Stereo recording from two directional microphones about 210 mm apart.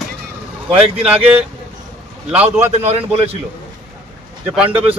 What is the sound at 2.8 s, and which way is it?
Speech, 30° right (ahead or behind).